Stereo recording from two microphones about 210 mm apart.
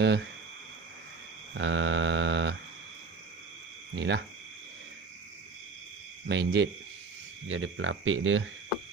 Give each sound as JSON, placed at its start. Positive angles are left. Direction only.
{"t": 0.0, "sound": "speech", "side_deg": -55}
{"t": 1.5, "sound": "mantra", "side_deg": -65}
{"t": 3.9, "sound": "speech", "side_deg": -55}
{"t": 6.2, "sound": "speech", "side_deg": -55}
{"t": 7.4, "sound": "speech", "side_deg": -70}